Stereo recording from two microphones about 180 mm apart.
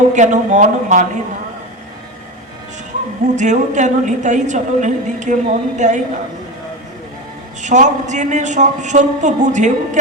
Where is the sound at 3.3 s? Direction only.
40° right (ahead or behind).